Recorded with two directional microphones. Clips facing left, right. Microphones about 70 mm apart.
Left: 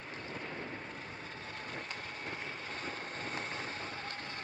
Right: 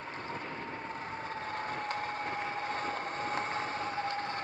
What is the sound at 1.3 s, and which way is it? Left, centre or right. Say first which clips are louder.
Vehicle: right 8 dB; right.